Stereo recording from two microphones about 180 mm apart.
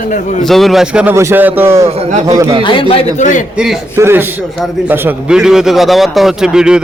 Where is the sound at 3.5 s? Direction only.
5° right (ahead or behind).